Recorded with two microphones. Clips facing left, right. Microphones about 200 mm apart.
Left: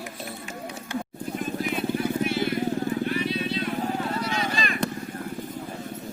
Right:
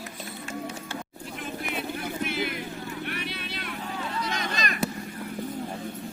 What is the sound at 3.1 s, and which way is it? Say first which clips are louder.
Vehicle: left 8 dB; 65° right (ahead or behind).